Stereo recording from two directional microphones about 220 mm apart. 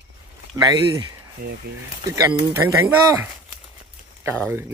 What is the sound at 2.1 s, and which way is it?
Speech, 15° right (ahead or behind).